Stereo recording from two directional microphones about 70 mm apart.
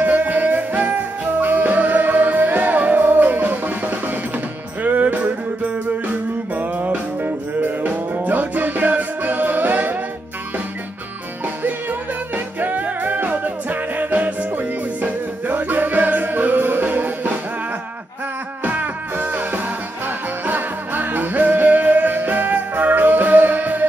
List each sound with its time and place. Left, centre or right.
0.0 s music: right
11.4 s music: right
18.6 s music: right